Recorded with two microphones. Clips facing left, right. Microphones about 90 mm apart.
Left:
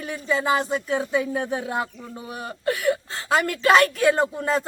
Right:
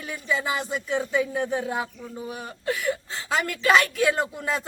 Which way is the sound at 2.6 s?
55° left (ahead or behind).